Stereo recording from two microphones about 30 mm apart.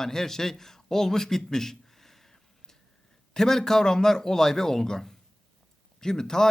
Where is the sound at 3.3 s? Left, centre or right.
Centre.